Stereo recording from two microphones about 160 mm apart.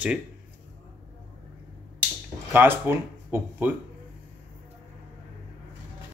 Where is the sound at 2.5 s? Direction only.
15° right (ahead or behind).